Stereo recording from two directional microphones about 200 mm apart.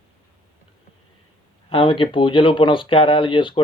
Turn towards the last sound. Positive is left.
turn(degrees=25)  # may be behind; listen again after turning